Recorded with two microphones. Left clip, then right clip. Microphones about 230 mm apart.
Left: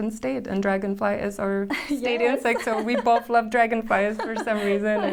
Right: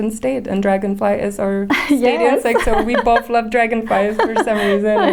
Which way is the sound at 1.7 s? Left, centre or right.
Right.